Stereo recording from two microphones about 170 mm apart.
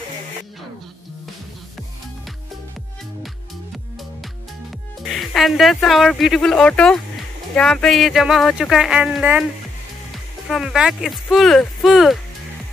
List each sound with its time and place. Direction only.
5.0 s speech: centre (ahead or behind)
10.5 s speech: centre (ahead or behind)